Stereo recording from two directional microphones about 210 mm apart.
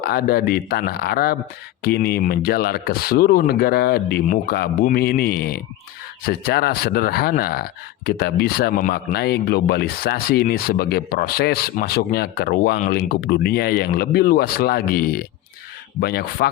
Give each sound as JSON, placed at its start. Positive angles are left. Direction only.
{"t": 0.0, "sound": "speech", "side_deg": 45}